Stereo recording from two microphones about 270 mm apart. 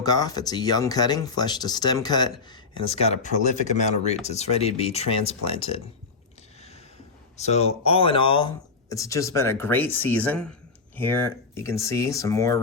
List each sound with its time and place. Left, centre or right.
0.0 s speech: centre
7.3 s speech: left